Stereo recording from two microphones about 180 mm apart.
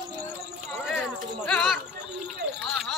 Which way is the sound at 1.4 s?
5° left (ahead or behind).